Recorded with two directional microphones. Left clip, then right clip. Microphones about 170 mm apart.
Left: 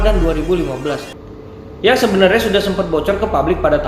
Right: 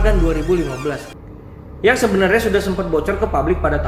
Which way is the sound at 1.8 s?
45° right (ahead or behind).